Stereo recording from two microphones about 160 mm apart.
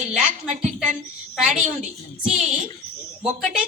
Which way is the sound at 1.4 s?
5° right (ahead or behind).